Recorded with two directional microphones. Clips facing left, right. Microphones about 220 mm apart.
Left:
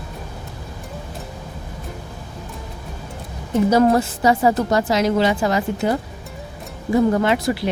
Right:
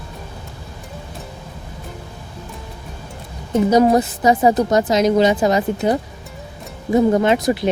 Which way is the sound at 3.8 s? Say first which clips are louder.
Right 3 dB; 20° right (ahead or behind).